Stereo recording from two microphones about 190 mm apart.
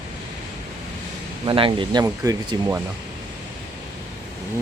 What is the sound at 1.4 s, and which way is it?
Speech, 25° right (ahead or behind).